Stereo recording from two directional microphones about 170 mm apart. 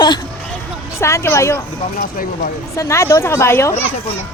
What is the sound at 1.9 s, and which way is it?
Speech, 55° left (ahead or behind).